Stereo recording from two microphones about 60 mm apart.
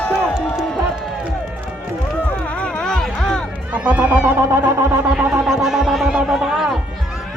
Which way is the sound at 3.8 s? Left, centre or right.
Right.